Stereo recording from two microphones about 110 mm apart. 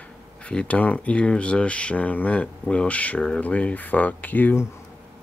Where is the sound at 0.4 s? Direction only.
10° left (ahead or behind).